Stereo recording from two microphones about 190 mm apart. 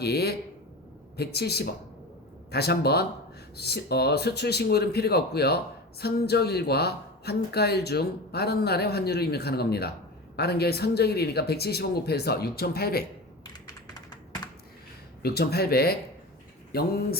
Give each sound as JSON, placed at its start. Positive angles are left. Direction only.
{"t": 0.0, "sound": "speech", "side_deg": 55}
{"t": 13.5, "sound": "computer keyboard", "side_deg": 20}
{"t": 15.2, "sound": "speech", "side_deg": 55}